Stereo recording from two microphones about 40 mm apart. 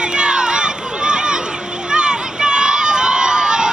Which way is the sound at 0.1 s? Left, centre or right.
Right.